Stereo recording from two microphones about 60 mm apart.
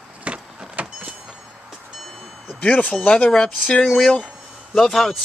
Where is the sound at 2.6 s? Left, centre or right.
Left.